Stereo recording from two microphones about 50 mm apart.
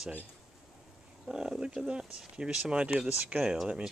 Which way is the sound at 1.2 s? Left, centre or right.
Centre.